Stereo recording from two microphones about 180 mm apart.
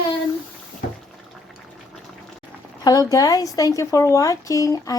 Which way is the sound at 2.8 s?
20° left (ahead or behind).